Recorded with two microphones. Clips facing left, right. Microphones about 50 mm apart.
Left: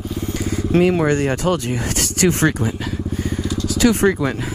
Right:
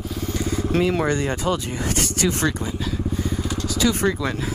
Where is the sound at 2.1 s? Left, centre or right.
Left.